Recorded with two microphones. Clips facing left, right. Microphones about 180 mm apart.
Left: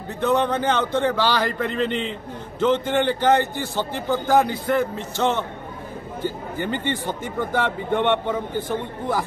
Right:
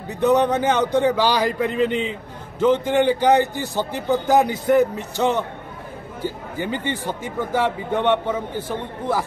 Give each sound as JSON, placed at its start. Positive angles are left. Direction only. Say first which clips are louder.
{"t": 0.2, "sound": "a man's voice", "louder": "right 3 dB", "side_deg": -15}
{"t": 1.7, "sound": "a man's voice", "louder": "right 3 dB", "side_deg": 0}